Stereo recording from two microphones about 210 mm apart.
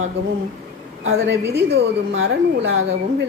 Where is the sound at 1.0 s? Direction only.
70° right (ahead or behind).